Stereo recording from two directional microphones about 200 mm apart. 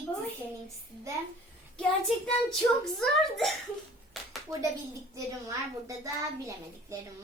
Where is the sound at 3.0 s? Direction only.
Centre (ahead or behind).